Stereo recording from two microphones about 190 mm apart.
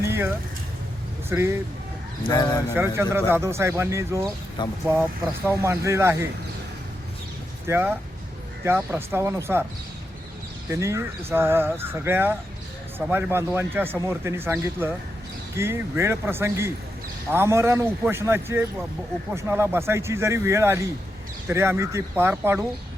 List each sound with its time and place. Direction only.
0.0 s vehicle: 10° right (ahead or behind)
1.3 s a man's voice: 15° right (ahead or behind)
2.2 s speech: 20° left (ahead or behind)
2.7 s a man's voice: 15° right (ahead or behind)
7.7 s a man's voice: 10° right (ahead or behind)
10.7 s a man's voice: 15° right (ahead or behind)